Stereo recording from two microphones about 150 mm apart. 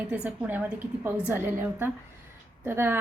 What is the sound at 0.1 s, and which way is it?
A woman's voice, 10° right (ahead or behind).